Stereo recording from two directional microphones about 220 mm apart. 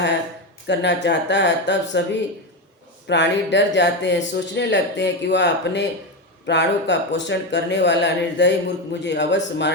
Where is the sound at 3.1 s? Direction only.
55° left (ahead or behind).